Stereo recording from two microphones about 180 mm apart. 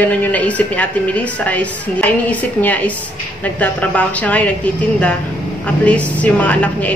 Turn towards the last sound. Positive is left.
turn(degrees=10)  # may be behind; listen again after turning